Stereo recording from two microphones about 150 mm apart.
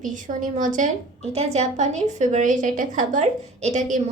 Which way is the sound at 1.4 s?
50° right (ahead or behind).